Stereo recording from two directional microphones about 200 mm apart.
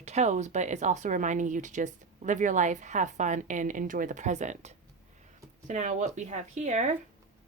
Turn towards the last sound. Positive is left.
turn(degrees=-35)  # may be behind; listen again after turning